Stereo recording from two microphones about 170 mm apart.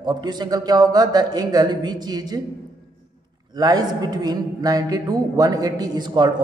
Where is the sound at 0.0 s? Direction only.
25° right (ahead or behind).